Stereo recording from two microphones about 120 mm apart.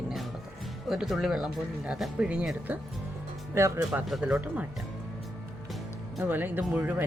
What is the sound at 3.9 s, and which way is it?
Speech, 5° right (ahead or behind).